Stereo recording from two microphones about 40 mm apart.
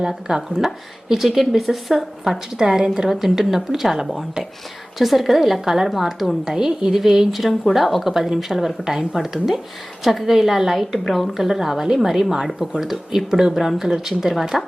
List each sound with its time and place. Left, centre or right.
0.0 s speech: centre
1.4 s a woman's voice: centre
2.6 s a woman's voice: centre